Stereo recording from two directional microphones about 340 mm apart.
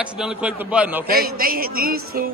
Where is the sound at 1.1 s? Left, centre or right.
Right.